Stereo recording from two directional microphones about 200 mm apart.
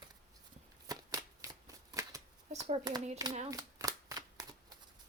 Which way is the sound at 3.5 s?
15° right (ahead or behind).